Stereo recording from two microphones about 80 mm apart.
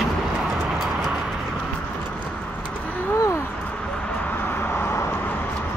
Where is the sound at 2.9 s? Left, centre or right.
Left.